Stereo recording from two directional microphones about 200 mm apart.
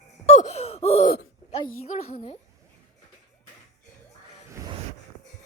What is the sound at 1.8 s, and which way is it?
Speech, 35° left (ahead or behind).